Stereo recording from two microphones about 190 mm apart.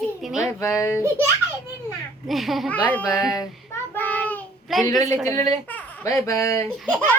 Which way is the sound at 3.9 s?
10° left (ahead or behind).